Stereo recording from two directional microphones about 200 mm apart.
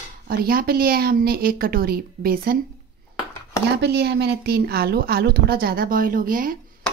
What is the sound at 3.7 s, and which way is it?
A woman's voice, 55° right (ahead or behind).